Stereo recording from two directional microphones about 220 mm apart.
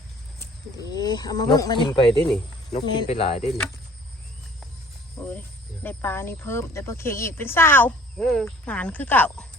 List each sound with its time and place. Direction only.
0.3 s speech: 15° left (ahead or behind)
2.0 s speech: centre (ahead or behind)
2.7 s speech: 25° left (ahead or behind)
5.8 s speech: 10° left (ahead or behind)